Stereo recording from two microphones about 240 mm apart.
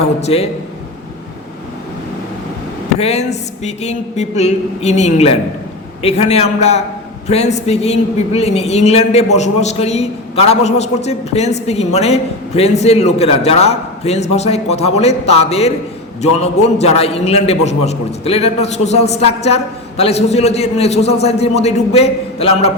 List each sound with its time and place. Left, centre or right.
0.0 s a man's voice: left
3.0 s a man's voice: left